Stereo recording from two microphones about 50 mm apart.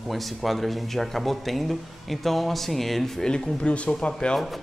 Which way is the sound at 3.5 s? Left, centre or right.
Left.